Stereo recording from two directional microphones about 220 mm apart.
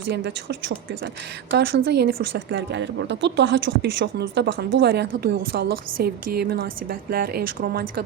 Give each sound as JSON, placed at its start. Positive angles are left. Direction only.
{"t": 0.1, "sound": "speech", "side_deg": -50}
{"t": 1.5, "sound": "speech", "side_deg": -45}